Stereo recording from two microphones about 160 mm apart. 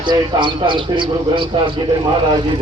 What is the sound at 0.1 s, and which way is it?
Speech, 30° right (ahead or behind).